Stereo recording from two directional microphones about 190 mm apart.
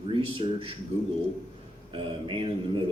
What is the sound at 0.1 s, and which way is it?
Speech, 25° right (ahead or behind).